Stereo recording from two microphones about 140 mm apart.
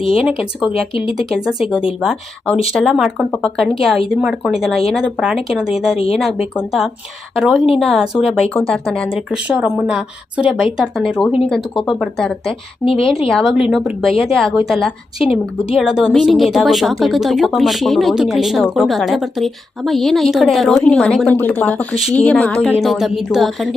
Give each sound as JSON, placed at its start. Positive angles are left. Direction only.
{"t": 0.0, "sound": "speech", "side_deg": 40}
{"t": 1.3, "sound": "a woman's voice", "side_deg": -5}
{"t": 2.7, "sound": "a woman's voice", "side_deg": 0}
{"t": 12.8, "sound": "a woman's voice", "side_deg": 40}
{"t": 13.2, "sound": "a woman's voice", "side_deg": 0}